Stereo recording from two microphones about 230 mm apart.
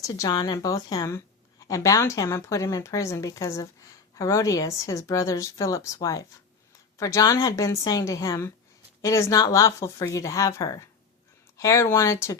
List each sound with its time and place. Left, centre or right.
0.0 s speech: centre